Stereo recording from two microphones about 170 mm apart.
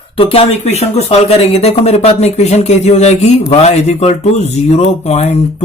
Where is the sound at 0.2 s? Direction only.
35° left (ahead or behind).